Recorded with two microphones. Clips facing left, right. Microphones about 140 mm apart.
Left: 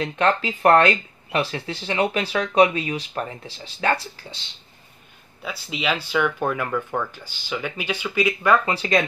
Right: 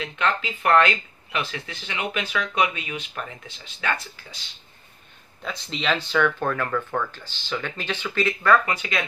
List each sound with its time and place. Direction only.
0.0 s speech: 35° left (ahead or behind)
5.4 s speech: 5° left (ahead or behind)
8.6 s speech: 35° left (ahead or behind)